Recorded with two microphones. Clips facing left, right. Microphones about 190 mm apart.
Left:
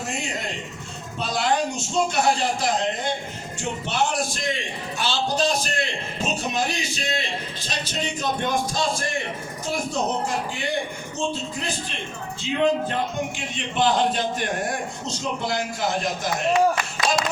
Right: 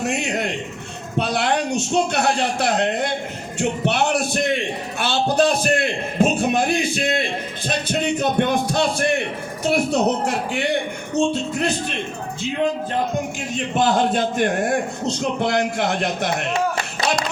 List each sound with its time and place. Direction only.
0.0 s a man's voice: 70° right (ahead or behind)
13.5 s a man's voice: 45° right (ahead or behind); by 16.5 s 65° right (ahead or behind)